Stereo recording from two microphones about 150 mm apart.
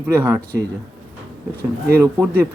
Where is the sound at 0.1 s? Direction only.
15° right (ahead or behind).